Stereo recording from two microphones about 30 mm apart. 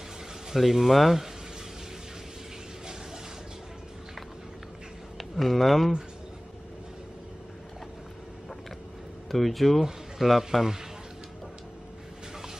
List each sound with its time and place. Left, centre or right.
0.6 s speech: centre
5.1 s speech: centre
9.3 s speech: centre